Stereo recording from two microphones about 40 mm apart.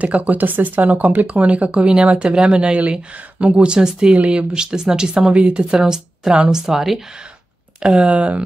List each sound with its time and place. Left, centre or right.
0.0 s speech: right
2.6 s speech: right
4.6 s speech: centre
7.8 s speech: right